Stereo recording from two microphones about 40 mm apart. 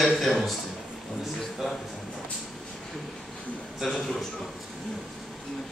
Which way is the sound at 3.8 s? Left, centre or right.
Centre.